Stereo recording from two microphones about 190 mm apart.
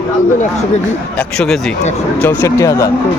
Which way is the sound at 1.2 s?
5° left (ahead or behind).